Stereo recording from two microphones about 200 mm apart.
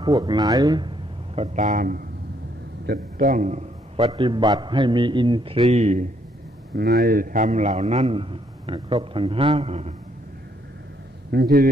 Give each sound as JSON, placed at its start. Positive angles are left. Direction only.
{"t": 0.0, "sound": "a man's voice", "side_deg": -20}
{"t": 4.0, "sound": "a man's voice", "side_deg": -25}
{"t": 6.7, "sound": "a man's voice", "side_deg": -50}
{"t": 11.3, "sound": "a man's voice", "side_deg": -50}